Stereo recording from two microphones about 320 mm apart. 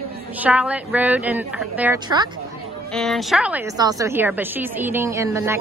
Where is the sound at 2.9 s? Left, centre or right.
Centre.